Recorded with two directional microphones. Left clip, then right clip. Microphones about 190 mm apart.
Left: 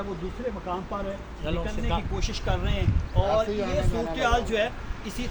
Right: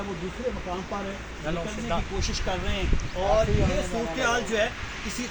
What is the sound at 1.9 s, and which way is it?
Speech, 30° left (ahead or behind).